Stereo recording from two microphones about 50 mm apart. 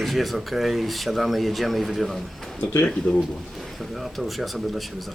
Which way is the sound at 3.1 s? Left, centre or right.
Left.